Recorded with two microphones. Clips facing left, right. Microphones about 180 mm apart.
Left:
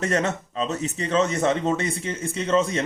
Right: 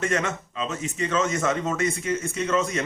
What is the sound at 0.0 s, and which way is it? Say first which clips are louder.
Speech: left 2 dB; 35° left (ahead or behind).